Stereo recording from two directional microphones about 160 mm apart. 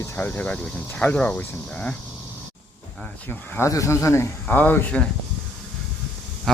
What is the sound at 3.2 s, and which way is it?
Speech, 15° left (ahead or behind).